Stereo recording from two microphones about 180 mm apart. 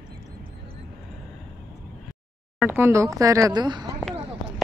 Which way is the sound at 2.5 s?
10° right (ahead or behind).